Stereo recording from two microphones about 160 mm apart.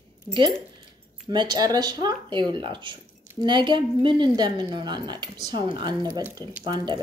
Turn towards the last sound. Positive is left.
turn(degrees=-25)  # may be behind; listen again after turning